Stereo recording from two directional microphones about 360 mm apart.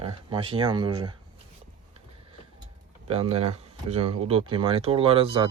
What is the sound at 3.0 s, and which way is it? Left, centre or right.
A man's voice, centre.